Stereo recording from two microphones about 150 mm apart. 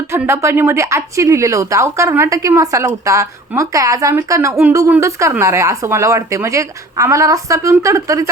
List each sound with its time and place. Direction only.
0.1 s speech: 15° right (ahead or behind)